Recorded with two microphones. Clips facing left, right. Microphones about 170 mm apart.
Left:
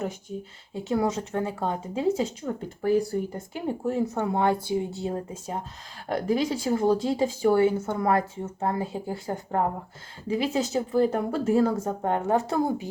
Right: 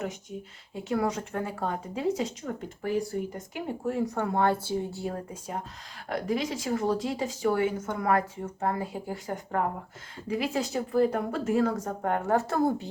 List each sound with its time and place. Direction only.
0.0 s speech: 30° left (ahead or behind); by 12.9 s 10° left (ahead or behind)